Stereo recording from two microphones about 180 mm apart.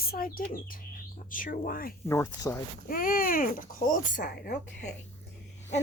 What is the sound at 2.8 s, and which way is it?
Speech, 50° left (ahead or behind).